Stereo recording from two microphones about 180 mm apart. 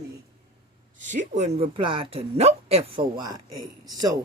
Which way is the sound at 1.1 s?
40° right (ahead or behind).